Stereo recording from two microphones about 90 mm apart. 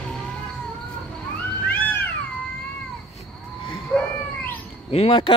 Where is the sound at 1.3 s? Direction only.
15° left (ahead or behind).